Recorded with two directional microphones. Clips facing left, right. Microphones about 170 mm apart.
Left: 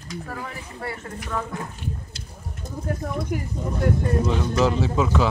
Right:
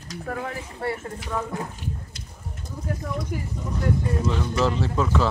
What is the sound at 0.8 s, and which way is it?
Speech, 30° right (ahead or behind).